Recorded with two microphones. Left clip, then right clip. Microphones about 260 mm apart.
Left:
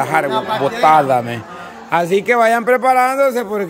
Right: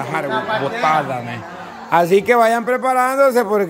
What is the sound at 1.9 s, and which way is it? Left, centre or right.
A man's voice, centre.